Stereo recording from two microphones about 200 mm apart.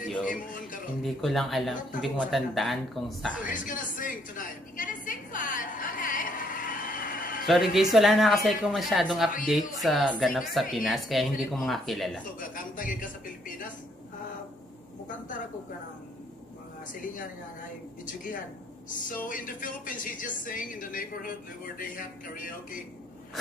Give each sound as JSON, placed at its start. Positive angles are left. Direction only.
{"t": 0.2, "sound": "music", "side_deg": 40}
{"t": 1.0, "sound": "speech", "side_deg": 0}
{"t": 3.4, "sound": "a sound", "side_deg": 40}
{"t": 7.4, "sound": "speech", "side_deg": 0}
{"t": 12.4, "sound": "speech", "side_deg": 45}
{"t": 18.0, "sound": "speech", "side_deg": 40}